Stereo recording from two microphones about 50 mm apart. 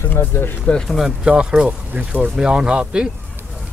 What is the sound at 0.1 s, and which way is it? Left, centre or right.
Speech, left.